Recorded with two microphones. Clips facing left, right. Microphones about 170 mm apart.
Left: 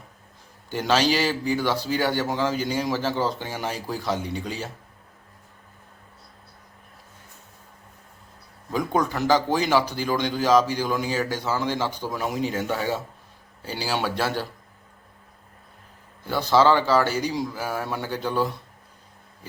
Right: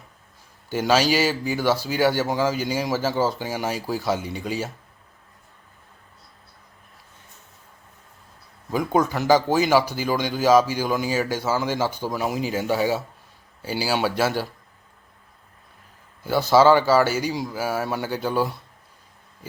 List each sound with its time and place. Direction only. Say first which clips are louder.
0.7 s speech: right 2 dB; 5° right (ahead or behind)
8.7 s a man's voice: right 3 dB; 5° right (ahead or behind)
16.2 s a man's voice: right 3 dB; 10° right (ahead or behind)